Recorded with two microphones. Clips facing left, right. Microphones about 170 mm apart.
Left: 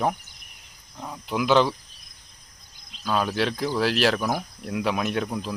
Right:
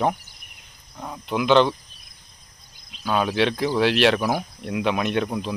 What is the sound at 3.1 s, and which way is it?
Speech, centre (ahead or behind).